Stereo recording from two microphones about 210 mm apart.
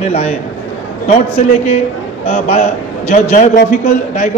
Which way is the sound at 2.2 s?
30° left (ahead or behind).